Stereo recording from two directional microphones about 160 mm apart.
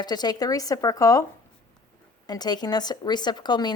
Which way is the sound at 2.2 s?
25° left (ahead or behind).